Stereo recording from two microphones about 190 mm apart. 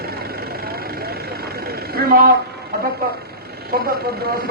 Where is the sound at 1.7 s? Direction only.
55° right (ahead or behind).